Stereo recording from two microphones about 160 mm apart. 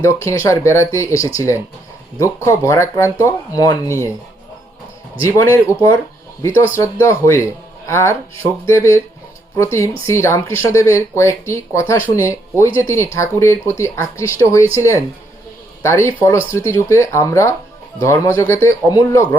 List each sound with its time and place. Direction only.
0.0 s speech: 20° left (ahead or behind)
5.2 s speech: 15° left (ahead or behind)